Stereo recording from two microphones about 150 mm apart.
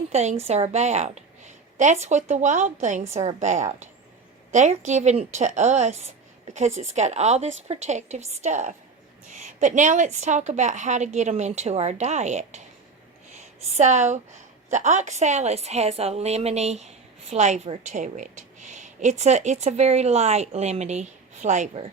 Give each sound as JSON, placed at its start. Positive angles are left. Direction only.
{"t": 0.1, "sound": "a woman's voice", "side_deg": -45}
{"t": 13.7, "sound": "a woman's voice", "side_deg": -50}